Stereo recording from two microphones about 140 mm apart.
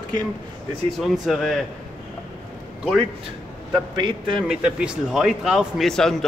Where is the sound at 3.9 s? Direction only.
35° right (ahead or behind).